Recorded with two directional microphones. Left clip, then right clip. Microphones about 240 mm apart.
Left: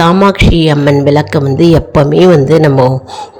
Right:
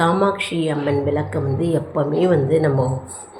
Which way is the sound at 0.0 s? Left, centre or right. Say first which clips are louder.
Left 10 dB; left.